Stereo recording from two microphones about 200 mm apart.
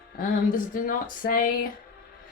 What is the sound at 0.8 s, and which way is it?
Speech, 45° left (ahead or behind).